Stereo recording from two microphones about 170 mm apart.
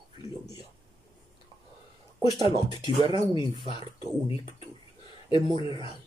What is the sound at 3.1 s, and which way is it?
Speech, 25° left (ahead or behind).